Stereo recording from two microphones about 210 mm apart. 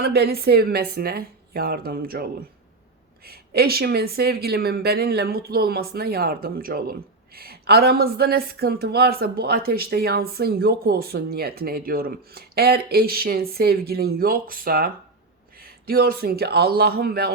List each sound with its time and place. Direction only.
0.0 s speech: 50° right (ahead or behind)
3.2 s speech: 45° right (ahead or behind)